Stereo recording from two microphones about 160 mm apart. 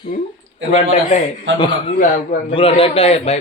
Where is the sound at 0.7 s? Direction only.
40° left (ahead or behind).